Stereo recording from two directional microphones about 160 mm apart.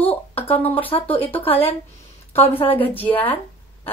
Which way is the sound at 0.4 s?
10° left (ahead or behind).